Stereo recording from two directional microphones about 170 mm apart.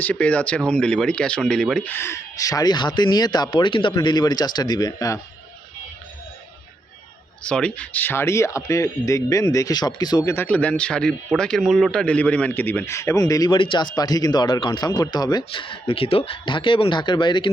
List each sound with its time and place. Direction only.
0.0 s speech: 10° left (ahead or behind)
7.4 s speech: 5° left (ahead or behind); by 10.3 s 25° left (ahead or behind)
10.3 s speech: 10° left (ahead or behind); by 17.5 s 25° left (ahead or behind)